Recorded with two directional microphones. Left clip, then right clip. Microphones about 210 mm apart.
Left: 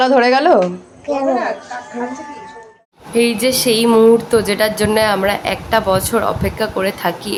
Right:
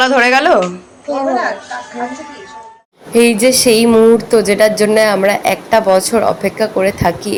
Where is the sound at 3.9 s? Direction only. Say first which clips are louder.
Left 2 dB; 5° right (ahead or behind).